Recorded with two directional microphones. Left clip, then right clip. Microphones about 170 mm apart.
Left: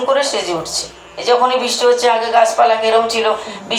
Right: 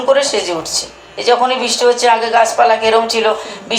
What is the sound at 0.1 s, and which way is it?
A man's voice, 30° right (ahead or behind).